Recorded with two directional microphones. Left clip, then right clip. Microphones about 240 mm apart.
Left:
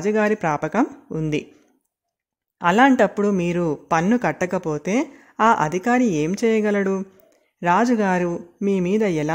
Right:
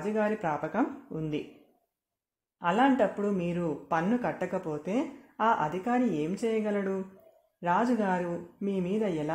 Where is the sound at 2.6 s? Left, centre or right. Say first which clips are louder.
Left 10 dB; left.